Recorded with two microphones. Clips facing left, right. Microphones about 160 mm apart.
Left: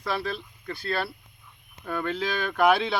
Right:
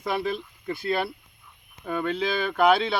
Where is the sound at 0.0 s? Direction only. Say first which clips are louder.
Right 3 dB; 20° right (ahead or behind).